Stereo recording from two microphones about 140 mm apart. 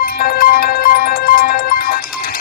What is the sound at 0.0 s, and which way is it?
Music, 90° left.